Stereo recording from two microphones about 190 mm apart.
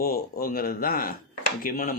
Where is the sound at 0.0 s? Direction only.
55° left (ahead or behind).